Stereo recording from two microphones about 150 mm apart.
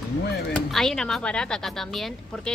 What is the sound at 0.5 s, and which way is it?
Speech, 5° left (ahead or behind).